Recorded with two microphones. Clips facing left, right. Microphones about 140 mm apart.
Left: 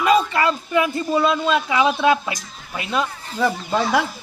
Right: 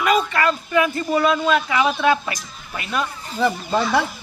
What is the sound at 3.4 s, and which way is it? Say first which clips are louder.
Speech: even; centre (ahead or behind).